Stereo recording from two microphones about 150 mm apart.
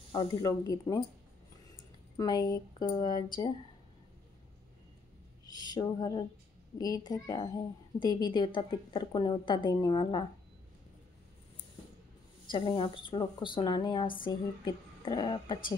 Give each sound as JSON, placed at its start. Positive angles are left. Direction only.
{"t": 0.1, "sound": "a woman's voice", "side_deg": 30}
{"t": 2.1, "sound": "a woman's voice", "side_deg": 25}
{"t": 5.5, "sound": "a woman's voice", "side_deg": 25}
{"t": 12.4, "sound": "a woman's voice", "side_deg": 30}